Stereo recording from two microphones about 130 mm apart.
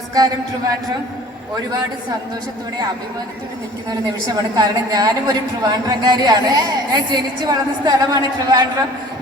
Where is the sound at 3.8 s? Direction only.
30° right (ahead or behind).